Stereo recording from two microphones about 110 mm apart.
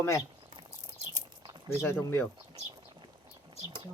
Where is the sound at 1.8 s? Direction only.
20° left (ahead or behind).